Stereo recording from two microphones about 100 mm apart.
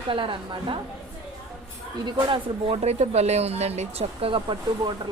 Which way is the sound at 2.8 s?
90° right.